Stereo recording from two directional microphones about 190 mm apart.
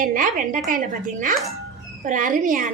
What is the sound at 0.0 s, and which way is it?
A woman's voice, 45° right (ahead or behind).